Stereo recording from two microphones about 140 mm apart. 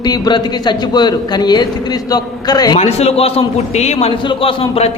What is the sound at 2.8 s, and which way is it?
A man's voice, 50° left (ahead or behind).